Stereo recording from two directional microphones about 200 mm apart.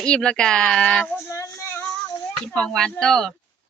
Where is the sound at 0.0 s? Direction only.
5° left (ahead or behind).